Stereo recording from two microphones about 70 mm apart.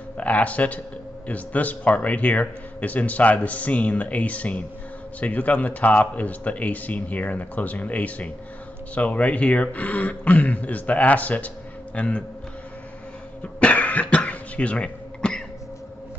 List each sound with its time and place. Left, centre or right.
0.2 s speech: left
13.4 s cough: centre